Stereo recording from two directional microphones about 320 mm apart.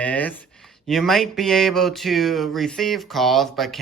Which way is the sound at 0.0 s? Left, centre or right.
Centre.